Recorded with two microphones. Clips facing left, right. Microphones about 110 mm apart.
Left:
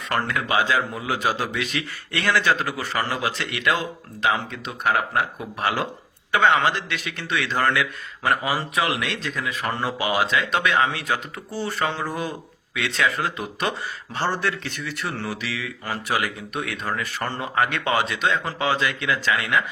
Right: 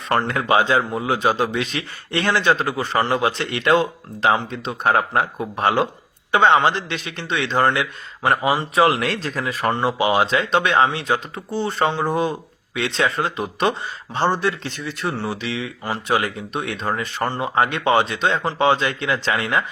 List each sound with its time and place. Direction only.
0.2 s speech: 30° right (ahead or behind)
9.8 s speech: 25° right (ahead or behind)